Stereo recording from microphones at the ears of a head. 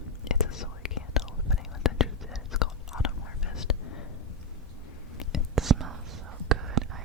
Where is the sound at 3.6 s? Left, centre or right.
Left.